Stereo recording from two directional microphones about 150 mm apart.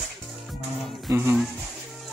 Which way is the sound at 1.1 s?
15° right (ahead or behind).